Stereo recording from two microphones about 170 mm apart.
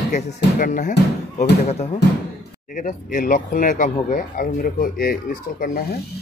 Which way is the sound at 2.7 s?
50° left (ahead or behind).